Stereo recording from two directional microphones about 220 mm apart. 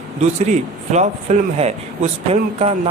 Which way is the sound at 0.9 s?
30° right (ahead or behind).